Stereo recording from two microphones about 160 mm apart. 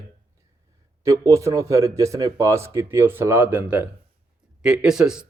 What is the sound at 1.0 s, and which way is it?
Speech, 20° right (ahead or behind).